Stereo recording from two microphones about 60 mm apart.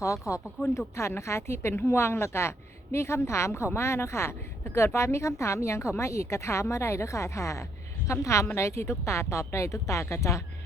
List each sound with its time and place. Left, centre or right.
0.0 s speech: left
0.9 s a woman's voice: left